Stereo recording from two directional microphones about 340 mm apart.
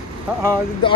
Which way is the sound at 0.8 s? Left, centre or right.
Centre.